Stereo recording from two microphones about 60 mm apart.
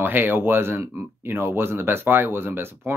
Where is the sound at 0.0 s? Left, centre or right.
Right.